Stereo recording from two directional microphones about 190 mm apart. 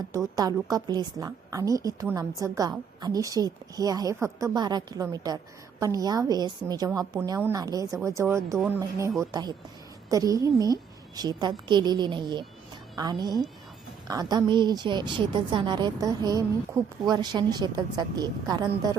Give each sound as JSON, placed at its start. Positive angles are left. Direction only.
{"t": 0.3, "sound": "a woman's voice", "side_deg": -20}